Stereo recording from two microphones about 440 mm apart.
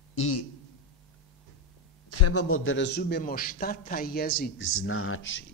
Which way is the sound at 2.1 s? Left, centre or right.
Left.